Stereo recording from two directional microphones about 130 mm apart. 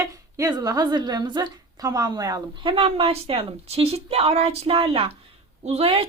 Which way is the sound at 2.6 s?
45° right (ahead or behind).